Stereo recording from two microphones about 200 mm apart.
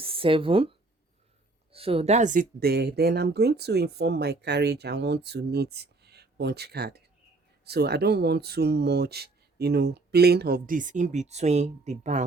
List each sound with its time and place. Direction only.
0.0 s speech: 25° right (ahead or behind)